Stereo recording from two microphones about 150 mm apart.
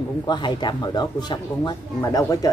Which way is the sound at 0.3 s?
30° left (ahead or behind).